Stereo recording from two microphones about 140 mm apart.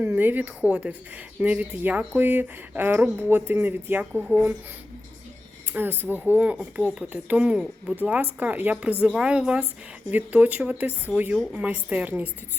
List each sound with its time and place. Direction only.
0.0 s speech: 15° right (ahead or behind)
5.7 s speech: 15° right (ahead or behind)